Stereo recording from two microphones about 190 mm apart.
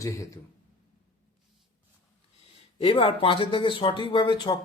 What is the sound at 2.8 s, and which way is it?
Speech, 30° left (ahead or behind).